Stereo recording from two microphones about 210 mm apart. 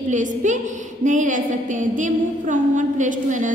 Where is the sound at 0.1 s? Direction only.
35° right (ahead or behind).